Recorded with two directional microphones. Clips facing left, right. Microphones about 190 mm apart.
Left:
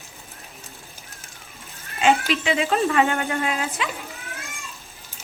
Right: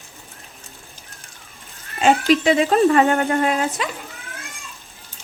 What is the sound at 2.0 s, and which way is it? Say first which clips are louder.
Speech: right 4 dB; 40° right (ahead or behind).